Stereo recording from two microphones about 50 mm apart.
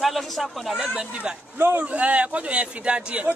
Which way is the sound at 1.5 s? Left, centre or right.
Right.